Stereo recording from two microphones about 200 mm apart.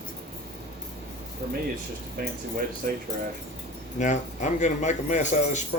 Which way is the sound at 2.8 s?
45° right (ahead or behind).